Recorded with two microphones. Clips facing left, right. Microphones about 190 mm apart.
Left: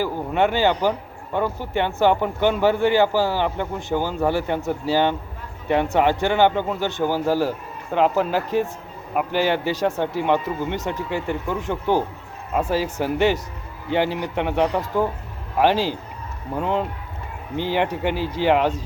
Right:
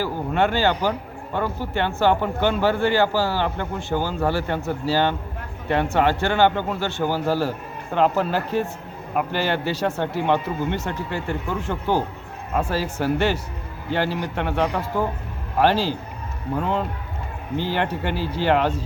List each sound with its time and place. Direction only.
0.0 s speech: 15° left (ahead or behind)